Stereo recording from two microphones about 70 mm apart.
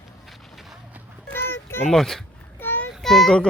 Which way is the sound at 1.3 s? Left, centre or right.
Left.